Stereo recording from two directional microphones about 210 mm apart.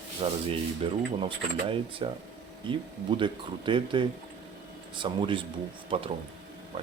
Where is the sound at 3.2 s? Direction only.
25° right (ahead or behind).